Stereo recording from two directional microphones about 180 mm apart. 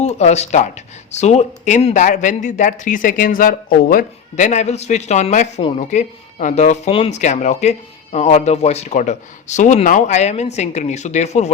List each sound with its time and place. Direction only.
0.0 s speech: 40° left (ahead or behind)